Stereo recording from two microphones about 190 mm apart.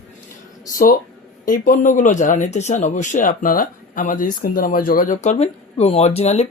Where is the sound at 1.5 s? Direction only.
45° left (ahead or behind).